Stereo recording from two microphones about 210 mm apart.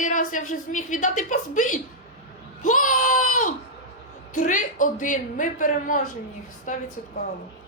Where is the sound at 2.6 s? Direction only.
40° left (ahead or behind).